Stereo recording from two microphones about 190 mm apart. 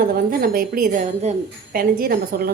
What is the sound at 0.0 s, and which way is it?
A woman's voice, 50° right (ahead or behind).